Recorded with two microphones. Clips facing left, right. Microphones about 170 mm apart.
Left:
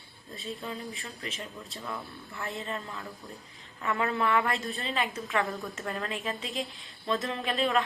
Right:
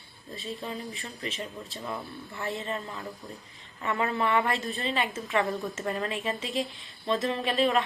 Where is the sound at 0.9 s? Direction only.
Centre (ahead or behind).